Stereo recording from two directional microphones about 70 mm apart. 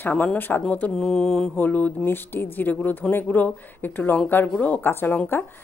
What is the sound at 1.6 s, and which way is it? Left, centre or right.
Speech, left.